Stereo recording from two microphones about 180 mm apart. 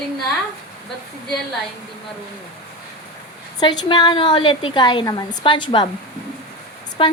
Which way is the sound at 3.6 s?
25° left (ahead or behind).